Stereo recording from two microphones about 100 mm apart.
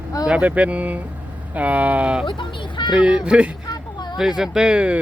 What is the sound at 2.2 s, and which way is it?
Speech, 55° left (ahead or behind).